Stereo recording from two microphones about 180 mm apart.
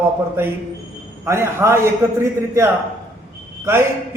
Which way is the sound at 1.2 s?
15° right (ahead or behind).